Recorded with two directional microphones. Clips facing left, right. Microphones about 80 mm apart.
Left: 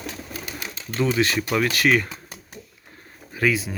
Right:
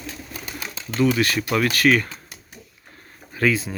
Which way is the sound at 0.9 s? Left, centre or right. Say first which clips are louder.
Right 2 dB; left.